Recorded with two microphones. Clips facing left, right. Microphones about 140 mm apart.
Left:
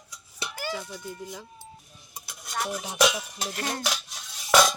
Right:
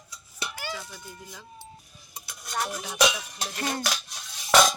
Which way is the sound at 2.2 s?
5° left (ahead or behind).